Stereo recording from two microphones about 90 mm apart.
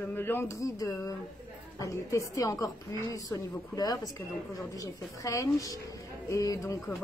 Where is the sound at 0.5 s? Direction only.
40° left (ahead or behind).